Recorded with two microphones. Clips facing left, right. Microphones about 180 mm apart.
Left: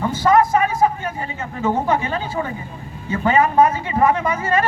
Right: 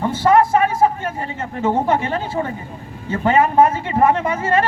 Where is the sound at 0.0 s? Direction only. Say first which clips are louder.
Right 1 dB; 30° right (ahead or behind).